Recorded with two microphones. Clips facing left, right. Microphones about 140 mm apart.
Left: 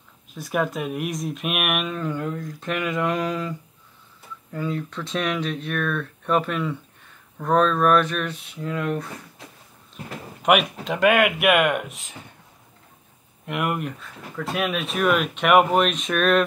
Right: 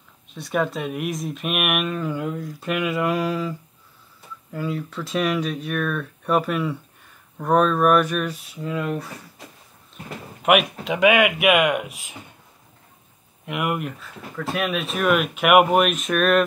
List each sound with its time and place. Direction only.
0.3 s speech: 5° left (ahead or behind)
10.4 s speech: centre (ahead or behind)
13.5 s speech: centre (ahead or behind)